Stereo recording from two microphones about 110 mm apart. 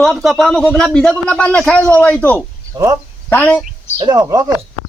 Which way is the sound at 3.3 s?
15° left (ahead or behind).